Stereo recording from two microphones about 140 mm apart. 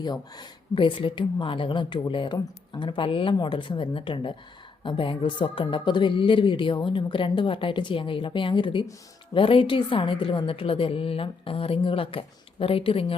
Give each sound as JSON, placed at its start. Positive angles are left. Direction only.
{"t": 0.0, "sound": "speech", "side_deg": 30}